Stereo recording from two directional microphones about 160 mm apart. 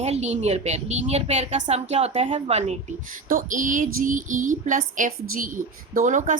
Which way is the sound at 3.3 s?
60° right (ahead or behind).